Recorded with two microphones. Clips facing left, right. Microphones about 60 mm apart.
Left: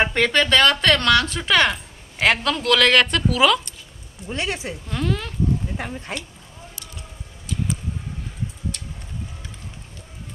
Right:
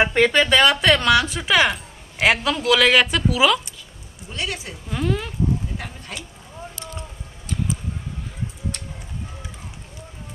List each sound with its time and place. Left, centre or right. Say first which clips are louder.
0.0 s speech: right 2 dB; centre
4.3 s speech: left 3 dB; left
4.8 s speech: right 2 dB; centre
5.8 s speech: left 5 dB; left